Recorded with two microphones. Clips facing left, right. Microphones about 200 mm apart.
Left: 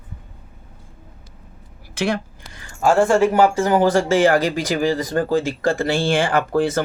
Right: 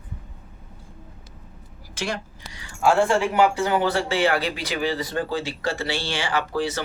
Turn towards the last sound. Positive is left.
turn(degrees=50)  # may be behind; listen again after turning